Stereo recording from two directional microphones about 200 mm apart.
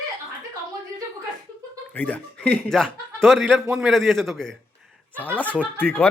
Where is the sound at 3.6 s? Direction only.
10° right (ahead or behind).